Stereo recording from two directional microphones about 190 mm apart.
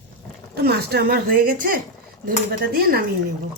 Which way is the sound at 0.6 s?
55° right (ahead or behind).